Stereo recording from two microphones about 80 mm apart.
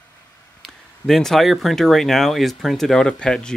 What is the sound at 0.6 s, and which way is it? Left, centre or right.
Speech, centre.